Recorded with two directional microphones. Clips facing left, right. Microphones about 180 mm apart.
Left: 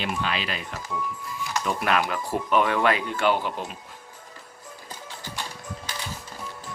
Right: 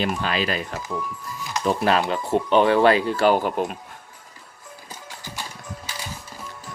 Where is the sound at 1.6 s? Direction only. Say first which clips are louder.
Right 5 dB; 30° right (ahead or behind); by 3.8 s 50° right (ahead or behind).